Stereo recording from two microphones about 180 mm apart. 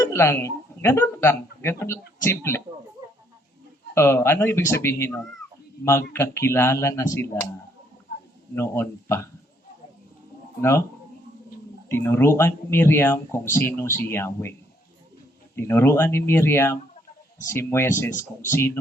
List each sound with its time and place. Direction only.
0.0 s speech: 15° left (ahead or behind)
3.9 s speech: 15° left (ahead or behind)
8.5 s speech: 15° left (ahead or behind)
10.6 s speech: 15° left (ahead or behind)
11.9 s speech: 15° left (ahead or behind)
15.5 s speech: 15° left (ahead or behind)
18.1 s speech: 45° left (ahead or behind)
18.5 s speech: 15° left (ahead or behind)